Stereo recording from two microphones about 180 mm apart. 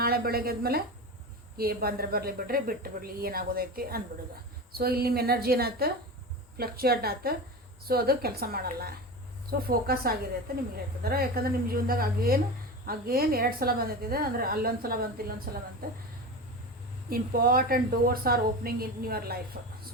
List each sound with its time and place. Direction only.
0.0 s speech: 60° right (ahead or behind)
17.1 s speech: 55° right (ahead or behind)